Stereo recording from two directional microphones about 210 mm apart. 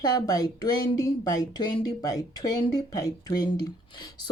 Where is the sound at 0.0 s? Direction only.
15° left (ahead or behind).